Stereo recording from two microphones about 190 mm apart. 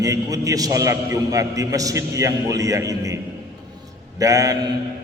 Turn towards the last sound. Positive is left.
turn(degrees=-15)  # may be behind; listen again after turning